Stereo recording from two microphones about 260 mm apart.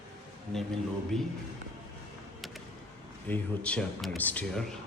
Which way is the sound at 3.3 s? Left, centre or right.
Centre.